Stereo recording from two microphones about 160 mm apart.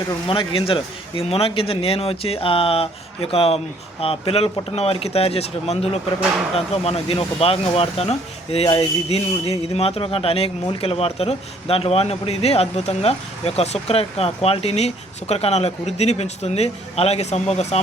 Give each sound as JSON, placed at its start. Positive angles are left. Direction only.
{"t": 0.3, "sound": "speech", "side_deg": 35}